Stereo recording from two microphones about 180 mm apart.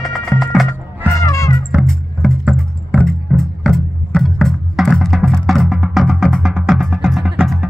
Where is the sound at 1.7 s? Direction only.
Centre (ahead or behind).